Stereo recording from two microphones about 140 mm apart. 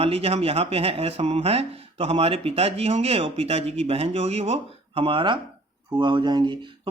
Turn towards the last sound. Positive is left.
turn(degrees=-35)  # may be behind; listen again after turning